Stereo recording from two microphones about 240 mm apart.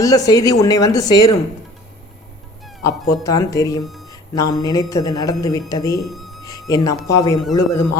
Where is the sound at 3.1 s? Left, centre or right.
Centre.